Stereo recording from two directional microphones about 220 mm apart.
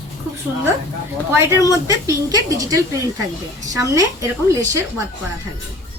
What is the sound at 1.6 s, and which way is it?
Speech, 15° right (ahead or behind).